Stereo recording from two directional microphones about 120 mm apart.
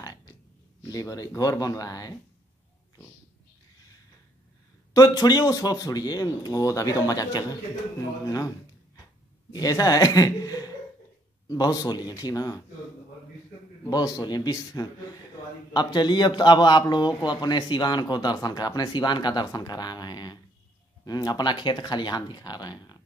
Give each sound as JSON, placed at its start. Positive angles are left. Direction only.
{"t": 0.0, "sound": "a sound", "side_deg": 30}
{"t": 0.8, "sound": "a man's voice", "side_deg": 30}
{"t": 4.9, "sound": "a man's voice", "side_deg": 35}
{"t": 9.5, "sound": "a man's voice", "side_deg": 30}
{"t": 13.8, "sound": "a man's voice", "side_deg": 35}